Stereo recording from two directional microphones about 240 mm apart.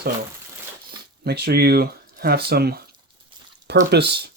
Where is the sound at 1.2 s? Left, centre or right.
Right.